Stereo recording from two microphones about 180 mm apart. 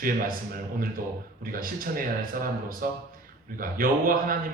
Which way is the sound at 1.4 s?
50° right (ahead or behind).